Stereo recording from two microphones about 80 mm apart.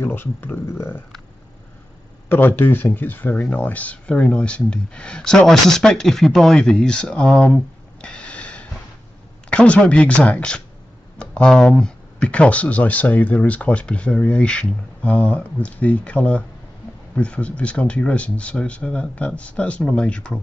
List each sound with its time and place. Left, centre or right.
0.0 s speech: left
2.2 s speech: left